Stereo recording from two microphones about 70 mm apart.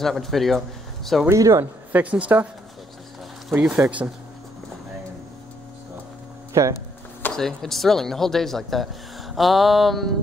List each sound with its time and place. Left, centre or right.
0.0 s speech: centre
1.3 s speech: right
1.9 s a woman's voice: right
3.7 s speech: centre
6.5 s speech: right
7.3 s speech: centre